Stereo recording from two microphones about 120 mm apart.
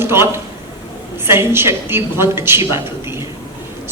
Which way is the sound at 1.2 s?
20° right (ahead or behind).